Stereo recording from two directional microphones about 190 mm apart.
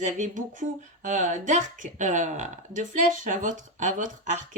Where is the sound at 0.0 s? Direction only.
40° right (ahead or behind).